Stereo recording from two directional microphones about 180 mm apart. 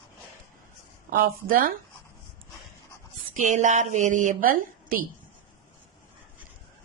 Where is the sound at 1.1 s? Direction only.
55° right (ahead or behind).